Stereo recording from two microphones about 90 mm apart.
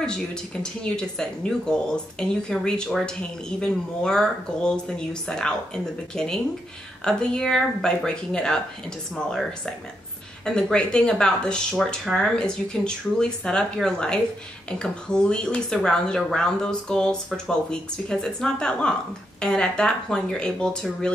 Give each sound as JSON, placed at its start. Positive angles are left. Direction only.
{"t": 0.0, "sound": "speech", "side_deg": 10}